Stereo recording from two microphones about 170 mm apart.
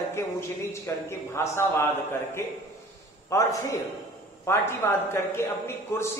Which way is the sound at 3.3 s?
20° left (ahead or behind).